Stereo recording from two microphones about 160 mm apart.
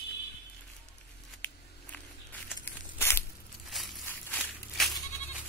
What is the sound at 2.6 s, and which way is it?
Tearing, 15° left (ahead or behind).